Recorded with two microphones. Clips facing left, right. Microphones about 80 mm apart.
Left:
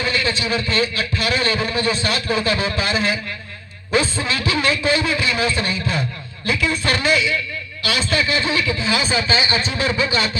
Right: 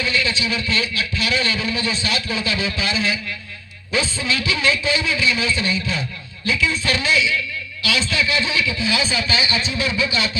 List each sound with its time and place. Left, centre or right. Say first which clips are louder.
0.0 s a man's voice: left 1 dB; left